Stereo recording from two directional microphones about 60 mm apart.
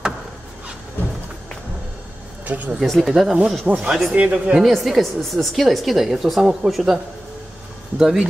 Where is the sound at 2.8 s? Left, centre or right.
Centre.